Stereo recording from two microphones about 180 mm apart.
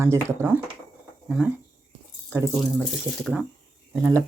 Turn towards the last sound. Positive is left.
turn(degrees=-15)  # may be behind; listen again after turning